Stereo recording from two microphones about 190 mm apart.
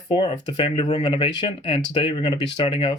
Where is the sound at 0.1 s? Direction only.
25° left (ahead or behind).